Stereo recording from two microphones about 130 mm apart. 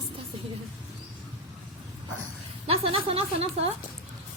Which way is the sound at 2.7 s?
50° right (ahead or behind).